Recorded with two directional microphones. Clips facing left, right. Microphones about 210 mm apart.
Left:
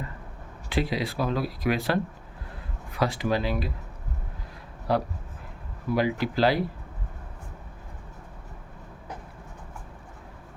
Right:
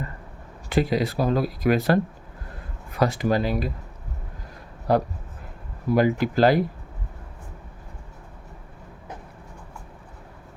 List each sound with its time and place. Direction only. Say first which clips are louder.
0.7 s speech: right 5 dB; 45° right (ahead or behind)
4.9 s speech: right 4 dB; 45° right (ahead or behind)